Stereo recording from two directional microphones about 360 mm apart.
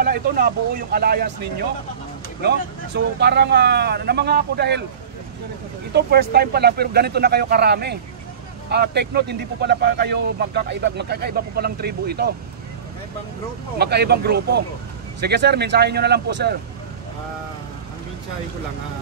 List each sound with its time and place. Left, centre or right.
0.0 s speech: right
3.2 s speech: right
5.9 s speech: right
13.7 s speech: right